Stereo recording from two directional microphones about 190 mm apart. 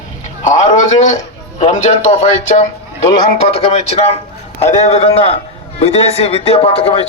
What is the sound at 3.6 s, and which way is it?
A man's voice, 35° left (ahead or behind).